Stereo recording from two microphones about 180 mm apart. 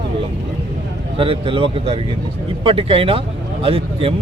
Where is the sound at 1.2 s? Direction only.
30° right (ahead or behind).